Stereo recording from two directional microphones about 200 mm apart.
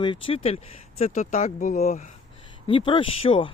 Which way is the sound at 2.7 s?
25° left (ahead or behind).